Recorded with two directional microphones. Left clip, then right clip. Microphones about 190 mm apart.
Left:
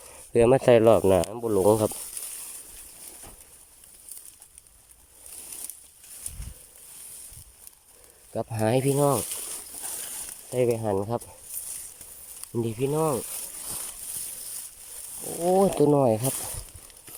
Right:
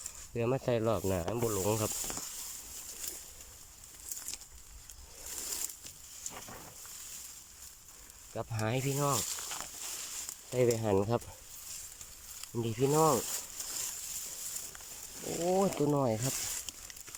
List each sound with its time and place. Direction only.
0.3 s speech: 45° left (ahead or behind)
6.3 s a sound: 50° left (ahead or behind)
8.3 s speech: 30° left (ahead or behind)
10.5 s speech: 10° left (ahead or behind)
12.8 s speech: 5° left (ahead or behind)
15.2 s speech: 20° left (ahead or behind)